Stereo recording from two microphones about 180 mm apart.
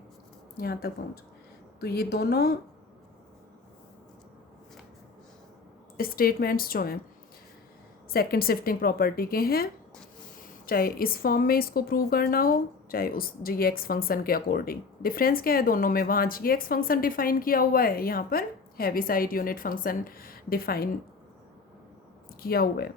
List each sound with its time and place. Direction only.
0.5 s a woman's voice: 60° left (ahead or behind)
6.0 s a woman's voice: 55° left (ahead or behind)
8.1 s a woman's voice: 55° left (ahead or behind)
10.7 s speech: 55° left (ahead or behind)
22.4 s a woman's voice: 55° left (ahead or behind)